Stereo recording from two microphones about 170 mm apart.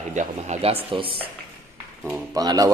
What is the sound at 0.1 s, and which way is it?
Speech, 45° right (ahead or behind).